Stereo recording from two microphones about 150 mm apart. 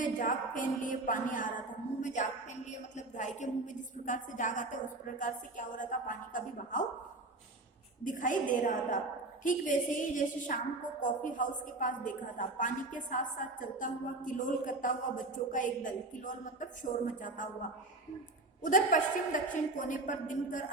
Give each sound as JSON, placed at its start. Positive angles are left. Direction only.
{"t": 0.0, "sound": "a woman's voice", "side_deg": 60}
{"t": 8.0, "sound": "a woman's voice", "side_deg": 60}